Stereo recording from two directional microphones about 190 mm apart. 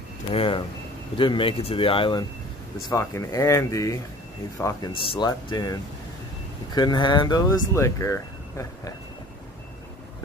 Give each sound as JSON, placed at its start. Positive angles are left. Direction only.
{"t": 0.3, "sound": "speech", "side_deg": 30}